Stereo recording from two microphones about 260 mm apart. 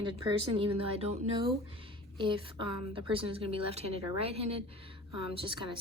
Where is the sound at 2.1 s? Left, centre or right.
Centre.